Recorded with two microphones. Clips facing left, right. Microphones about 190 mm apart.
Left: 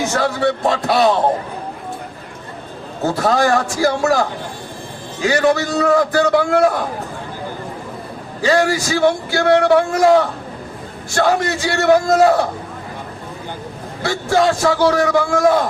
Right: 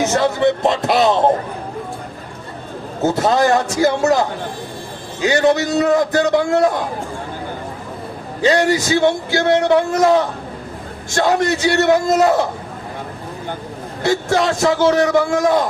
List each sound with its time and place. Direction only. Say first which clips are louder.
0.0 s a man's voice: right 2 dB; 20° right (ahead or behind)
3.0 s a man's voice: right 1 dB; 20° right (ahead or behind)
8.4 s a man's voice: right 1 dB; 20° right (ahead or behind)
14.0 s a man's voice: even; 20° right (ahead or behind)